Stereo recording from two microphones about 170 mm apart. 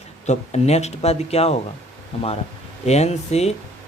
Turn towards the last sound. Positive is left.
turn(degrees=40)  # may be behind; listen again after turning